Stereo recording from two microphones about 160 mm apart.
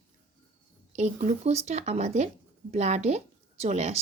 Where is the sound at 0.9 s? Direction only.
45° right (ahead or behind).